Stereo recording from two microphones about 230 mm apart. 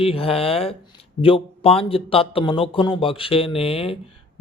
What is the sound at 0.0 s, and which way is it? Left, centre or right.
A man's voice, left.